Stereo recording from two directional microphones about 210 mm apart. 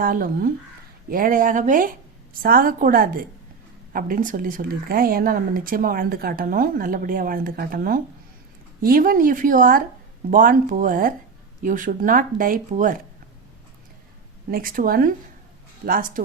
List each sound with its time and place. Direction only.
0.0 s speech: 40° right (ahead or behind)
14.5 s speech: 40° right (ahead or behind)